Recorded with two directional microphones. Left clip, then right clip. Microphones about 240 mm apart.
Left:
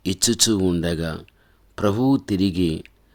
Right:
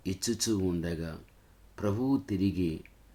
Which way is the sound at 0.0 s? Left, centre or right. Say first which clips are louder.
Left 13 dB; left.